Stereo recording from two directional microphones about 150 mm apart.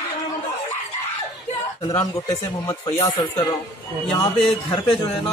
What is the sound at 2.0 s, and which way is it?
A man's voice, 20° left (ahead or behind).